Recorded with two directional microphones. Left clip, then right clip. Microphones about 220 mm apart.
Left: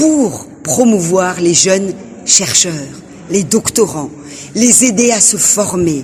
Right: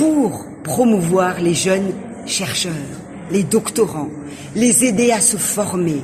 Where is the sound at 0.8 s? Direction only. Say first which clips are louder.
Left 4 dB; 50° left (ahead or behind).